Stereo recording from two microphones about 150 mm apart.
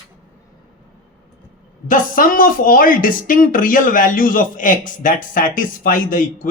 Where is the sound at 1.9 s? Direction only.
65° left (ahead or behind).